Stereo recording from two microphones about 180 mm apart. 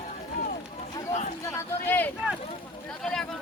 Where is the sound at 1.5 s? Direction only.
10° left (ahead or behind).